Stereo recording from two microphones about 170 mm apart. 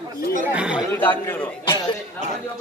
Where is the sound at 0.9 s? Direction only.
10° left (ahead or behind).